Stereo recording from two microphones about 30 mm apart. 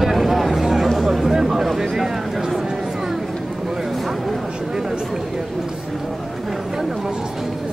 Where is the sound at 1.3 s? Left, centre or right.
Centre.